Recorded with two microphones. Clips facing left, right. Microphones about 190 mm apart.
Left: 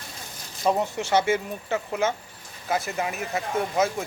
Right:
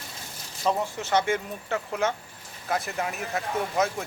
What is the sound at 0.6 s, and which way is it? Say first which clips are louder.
Speech: left 3 dB; 15° left (ahead or behind).